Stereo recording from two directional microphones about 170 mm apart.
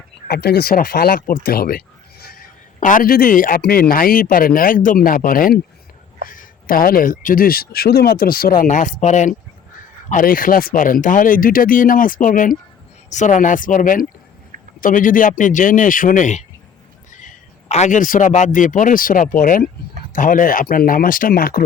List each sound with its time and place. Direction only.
0.3 s a man's voice: 70° left (ahead or behind)